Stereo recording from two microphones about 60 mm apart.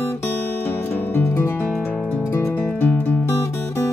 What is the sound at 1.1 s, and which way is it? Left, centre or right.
Music, left.